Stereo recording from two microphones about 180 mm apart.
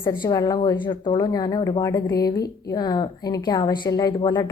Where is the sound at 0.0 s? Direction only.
20° left (ahead or behind).